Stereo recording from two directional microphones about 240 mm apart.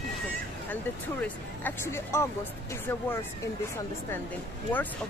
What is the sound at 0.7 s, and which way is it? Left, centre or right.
Speech, centre.